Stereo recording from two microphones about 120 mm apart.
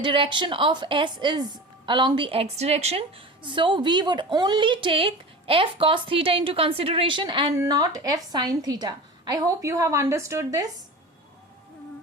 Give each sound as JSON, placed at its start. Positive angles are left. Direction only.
{"t": 0.0, "sound": "speech", "side_deg": -45}
{"t": 7.5, "sound": "a woman's voice", "side_deg": -25}